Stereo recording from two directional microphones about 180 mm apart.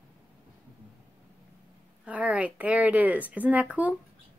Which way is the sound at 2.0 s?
10° right (ahead or behind).